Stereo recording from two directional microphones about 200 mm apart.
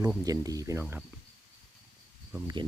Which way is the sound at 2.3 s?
20° right (ahead or behind).